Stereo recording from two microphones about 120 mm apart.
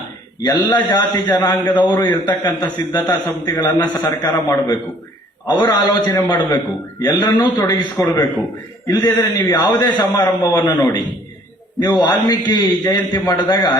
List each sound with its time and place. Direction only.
0.4 s a man's voice: 35° left (ahead or behind)